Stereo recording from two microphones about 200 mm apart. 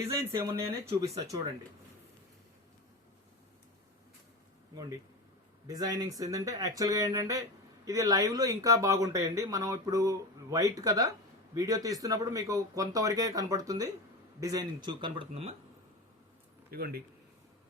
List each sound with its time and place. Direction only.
0.1 s speech: 15° right (ahead or behind)
5.6 s speech: 20° right (ahead or behind)
16.7 s speech: 50° right (ahead or behind)